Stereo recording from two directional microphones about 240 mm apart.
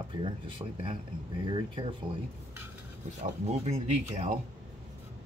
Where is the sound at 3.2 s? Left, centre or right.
Right.